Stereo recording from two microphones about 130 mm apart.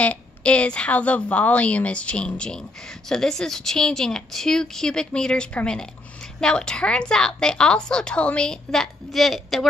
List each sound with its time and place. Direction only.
0.0 s a woman's voice: 10° left (ahead or behind)